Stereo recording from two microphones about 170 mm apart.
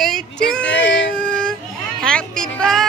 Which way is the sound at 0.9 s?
90° left.